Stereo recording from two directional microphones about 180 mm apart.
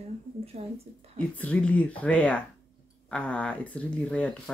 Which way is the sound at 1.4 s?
10° left (ahead or behind).